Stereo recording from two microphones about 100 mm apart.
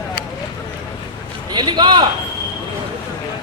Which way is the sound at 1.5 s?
50° right (ahead or behind).